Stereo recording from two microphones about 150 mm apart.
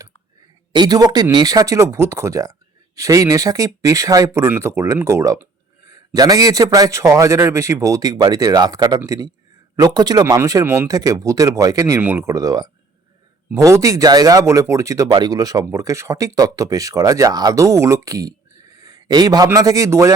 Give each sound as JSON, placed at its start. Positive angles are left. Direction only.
{"t": 0.7, "sound": "speech", "side_deg": -25}
{"t": 18.8, "sound": "a sound", "side_deg": -25}
{"t": 19.5, "sound": "speech", "side_deg": -25}